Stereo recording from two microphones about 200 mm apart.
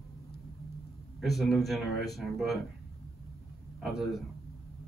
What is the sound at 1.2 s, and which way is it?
Speech, centre (ahead or behind).